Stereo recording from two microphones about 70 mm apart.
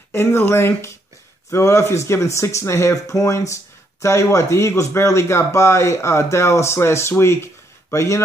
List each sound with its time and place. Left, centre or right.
0.1 s speech: left